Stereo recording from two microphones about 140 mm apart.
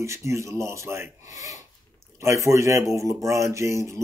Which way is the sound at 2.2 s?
20° right (ahead or behind).